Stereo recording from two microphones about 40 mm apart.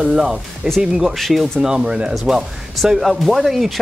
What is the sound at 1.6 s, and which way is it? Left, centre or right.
Speech, centre.